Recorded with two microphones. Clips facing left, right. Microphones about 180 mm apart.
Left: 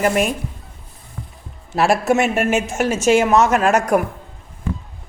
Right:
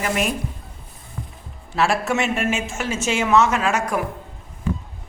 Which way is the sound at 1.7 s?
40° left (ahead or behind).